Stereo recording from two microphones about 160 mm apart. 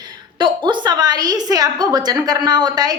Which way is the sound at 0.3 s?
30° right (ahead or behind).